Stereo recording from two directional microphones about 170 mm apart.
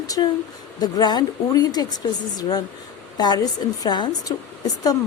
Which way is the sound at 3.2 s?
25° left (ahead or behind).